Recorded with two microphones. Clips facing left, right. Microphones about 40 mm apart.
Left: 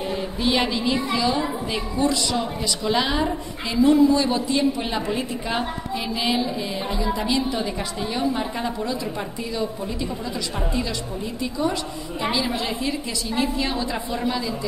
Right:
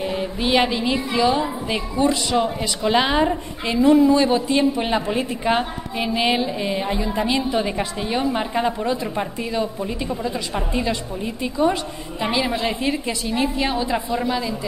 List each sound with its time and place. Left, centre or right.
0.0 s a sound: centre
1.7 s a woman's voice: right
10.7 s a woman's voice: right
13.3 s a woman's voice: right